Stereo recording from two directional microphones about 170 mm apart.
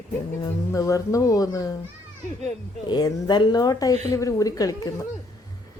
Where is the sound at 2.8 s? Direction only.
25° left (ahead or behind).